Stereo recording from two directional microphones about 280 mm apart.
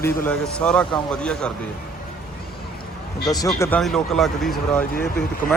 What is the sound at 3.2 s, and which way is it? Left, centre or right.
Speech, centre.